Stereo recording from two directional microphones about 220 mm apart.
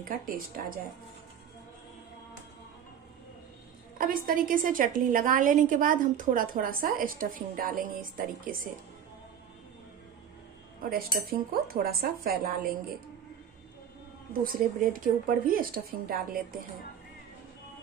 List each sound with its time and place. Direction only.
0.1 s a woman's voice: 40° right (ahead or behind)
4.0 s a woman's voice: 40° right (ahead or behind)
10.8 s speech: 40° right (ahead or behind)
14.4 s a woman's voice: 40° right (ahead or behind)